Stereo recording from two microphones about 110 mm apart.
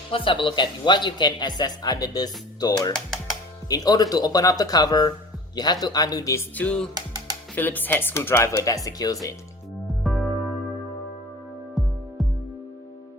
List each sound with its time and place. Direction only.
0.1 s a man's voice: 50° left (ahead or behind); by 6.4 s 35° left (ahead or behind)
6.6 s music: 10° left (ahead or behind)
6.9 s music: 35° right (ahead or behind)
7.5 s speech: 15° left (ahead or behind); by 9.3 s 35° left (ahead or behind)
9.8 s music: centre (ahead or behind)
11.7 s music: centre (ahead or behind)